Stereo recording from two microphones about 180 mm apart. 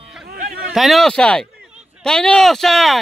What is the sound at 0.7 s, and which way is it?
Speech, centre (ahead or behind).